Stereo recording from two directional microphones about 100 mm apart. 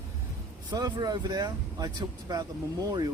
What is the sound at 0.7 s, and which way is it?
Speech, 40° right (ahead or behind).